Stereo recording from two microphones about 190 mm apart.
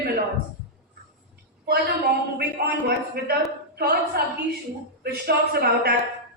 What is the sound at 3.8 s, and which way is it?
A man's voice, 55° right (ahead or behind).